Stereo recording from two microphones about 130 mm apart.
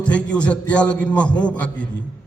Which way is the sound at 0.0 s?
10° left (ahead or behind).